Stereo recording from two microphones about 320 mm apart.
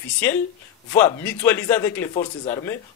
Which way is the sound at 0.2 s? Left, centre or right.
Centre.